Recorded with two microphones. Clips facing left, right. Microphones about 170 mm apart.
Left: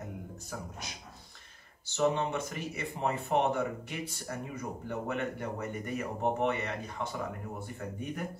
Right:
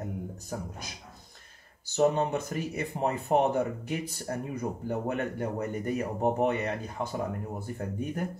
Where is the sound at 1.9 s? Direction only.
45° right (ahead or behind).